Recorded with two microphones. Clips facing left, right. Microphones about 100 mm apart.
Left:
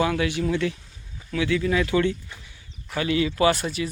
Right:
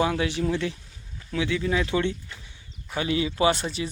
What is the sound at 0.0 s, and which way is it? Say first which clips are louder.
Speech: left 1 dB; 25° right (ahead or behind).